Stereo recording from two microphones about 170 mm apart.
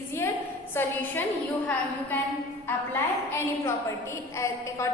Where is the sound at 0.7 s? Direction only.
10° left (ahead or behind).